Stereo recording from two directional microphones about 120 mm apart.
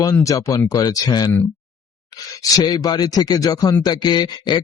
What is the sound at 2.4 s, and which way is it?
Speech, 30° left (ahead or behind).